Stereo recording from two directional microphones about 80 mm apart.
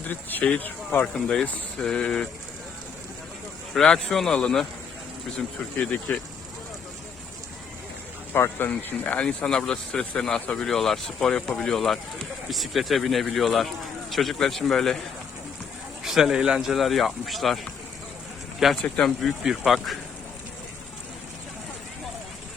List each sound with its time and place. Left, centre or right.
0.1 s speech: left
3.8 s speech: centre
5.7 s speech: centre
8.3 s speech: left; by 15.0 s centre
16.0 s speech: centre
18.8 s speech: centre
19.2 s speech: centre